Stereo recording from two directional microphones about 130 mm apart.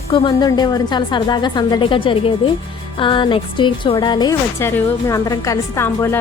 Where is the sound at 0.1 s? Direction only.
40° left (ahead or behind).